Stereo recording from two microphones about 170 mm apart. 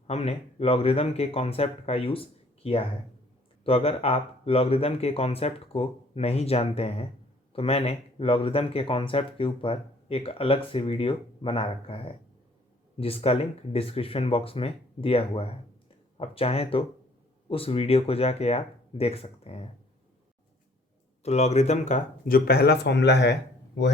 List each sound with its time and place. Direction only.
0.1 s speech: 35° left (ahead or behind)
21.2 s speech: 40° left (ahead or behind); by 23.9 s 90° left